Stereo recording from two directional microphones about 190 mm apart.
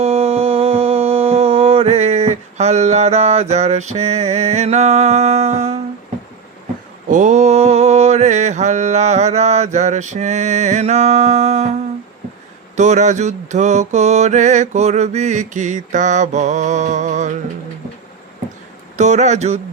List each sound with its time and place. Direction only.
0.0 s a sound: 30° right (ahead or behind)
7.1 s mantra: 40° right (ahead or behind)
12.7 s mantra: 40° right (ahead or behind)
18.9 s mantra: 40° right (ahead or behind)